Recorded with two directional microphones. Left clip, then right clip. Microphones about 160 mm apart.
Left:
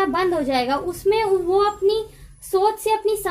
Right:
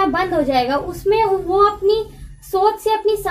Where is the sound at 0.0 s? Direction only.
55° left (ahead or behind).